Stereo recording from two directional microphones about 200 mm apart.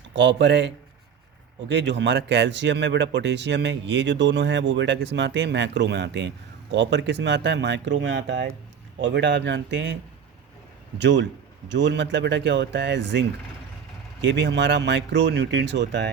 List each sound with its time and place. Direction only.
0.1 s speech: 65° right (ahead or behind)